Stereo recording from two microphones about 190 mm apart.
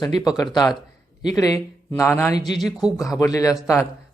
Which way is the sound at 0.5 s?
20° left (ahead or behind).